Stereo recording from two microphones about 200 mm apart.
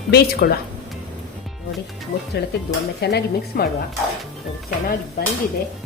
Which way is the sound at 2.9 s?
55° left (ahead or behind).